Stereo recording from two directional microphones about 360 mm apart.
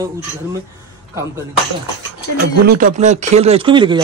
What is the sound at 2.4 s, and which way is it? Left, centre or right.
Speech, right.